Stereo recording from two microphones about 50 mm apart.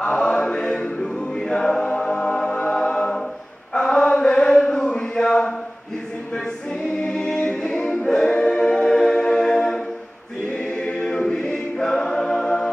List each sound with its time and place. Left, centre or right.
0.0 s chant: centre
1.5 s music: centre
2.8 s choir: centre
3.7 s chant: centre
4.8 s a sound: centre
7.1 s a capella: centre
10.8 s choir: left